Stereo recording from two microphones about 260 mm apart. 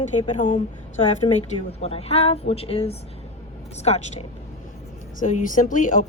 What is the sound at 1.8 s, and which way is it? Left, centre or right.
A woman's voice, left.